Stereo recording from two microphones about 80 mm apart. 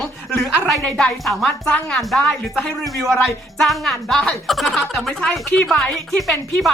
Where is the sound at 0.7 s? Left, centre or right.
Centre.